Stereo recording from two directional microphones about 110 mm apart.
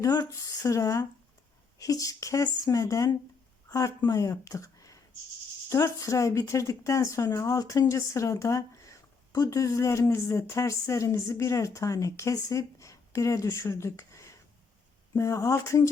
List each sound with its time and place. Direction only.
0.0 s speech: 30° left (ahead or behind)